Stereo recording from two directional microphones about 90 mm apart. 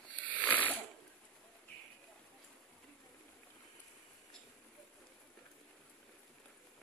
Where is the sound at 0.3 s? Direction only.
15° left (ahead or behind).